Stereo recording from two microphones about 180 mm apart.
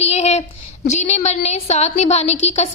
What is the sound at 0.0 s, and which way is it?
Child singing, 35° left (ahead or behind).